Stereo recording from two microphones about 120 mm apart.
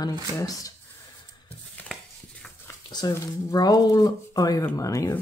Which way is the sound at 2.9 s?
35° left (ahead or behind).